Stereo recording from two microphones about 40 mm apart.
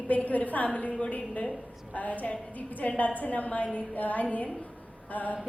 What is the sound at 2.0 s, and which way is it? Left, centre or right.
A woman's voice, left.